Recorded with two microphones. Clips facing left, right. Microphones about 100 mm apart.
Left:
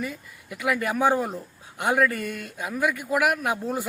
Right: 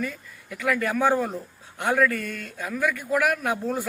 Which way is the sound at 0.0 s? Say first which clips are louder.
Right 1 dB; 10° left (ahead or behind).